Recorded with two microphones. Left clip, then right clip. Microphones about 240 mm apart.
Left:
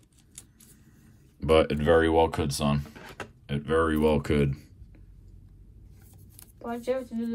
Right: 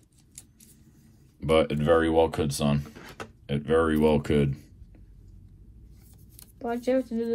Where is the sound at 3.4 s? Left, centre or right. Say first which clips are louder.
Right 2 dB; centre.